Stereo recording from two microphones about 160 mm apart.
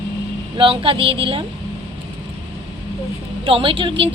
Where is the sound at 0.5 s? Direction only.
35° right (ahead or behind).